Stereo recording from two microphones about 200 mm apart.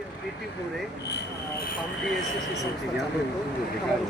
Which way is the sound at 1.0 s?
55° left (ahead or behind).